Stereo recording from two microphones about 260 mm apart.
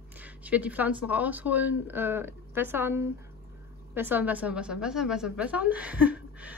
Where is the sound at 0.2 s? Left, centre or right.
Centre.